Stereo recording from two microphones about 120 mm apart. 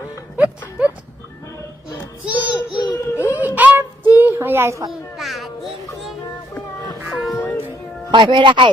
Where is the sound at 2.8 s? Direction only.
30° left (ahead or behind).